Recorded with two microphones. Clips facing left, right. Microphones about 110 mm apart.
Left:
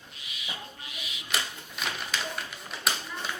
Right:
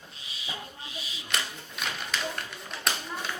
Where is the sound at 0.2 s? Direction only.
30° right (ahead or behind).